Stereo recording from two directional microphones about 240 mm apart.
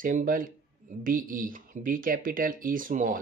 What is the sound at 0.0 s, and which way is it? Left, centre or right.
Speech, right.